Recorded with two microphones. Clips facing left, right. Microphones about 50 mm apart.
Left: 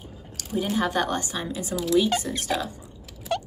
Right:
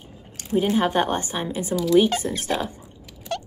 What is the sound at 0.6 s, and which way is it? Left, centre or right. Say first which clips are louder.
A woman's voice: right 4 dB; right.